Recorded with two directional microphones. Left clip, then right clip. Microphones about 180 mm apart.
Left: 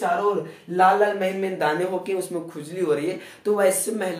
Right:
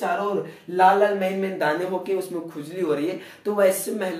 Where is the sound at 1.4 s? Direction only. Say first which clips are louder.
Left 1 dB; 20° left (ahead or behind).